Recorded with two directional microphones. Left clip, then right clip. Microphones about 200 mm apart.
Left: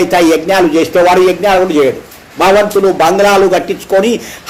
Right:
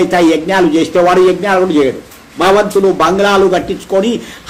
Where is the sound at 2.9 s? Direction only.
15° right (ahead or behind).